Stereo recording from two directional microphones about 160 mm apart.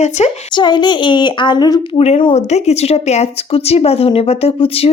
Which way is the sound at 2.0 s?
35° left (ahead or behind).